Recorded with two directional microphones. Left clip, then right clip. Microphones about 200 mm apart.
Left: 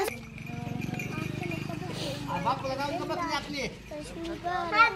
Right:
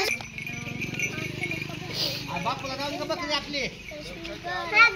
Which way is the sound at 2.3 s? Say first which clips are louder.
Even; 35° left (ahead or behind).